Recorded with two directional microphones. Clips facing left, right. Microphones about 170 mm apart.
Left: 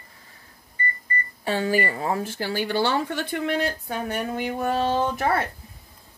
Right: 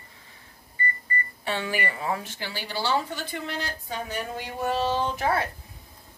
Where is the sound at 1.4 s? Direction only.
40° left (ahead or behind); by 4.2 s 55° left (ahead or behind).